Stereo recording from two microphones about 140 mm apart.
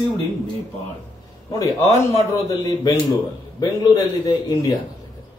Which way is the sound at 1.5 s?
25° left (ahead or behind).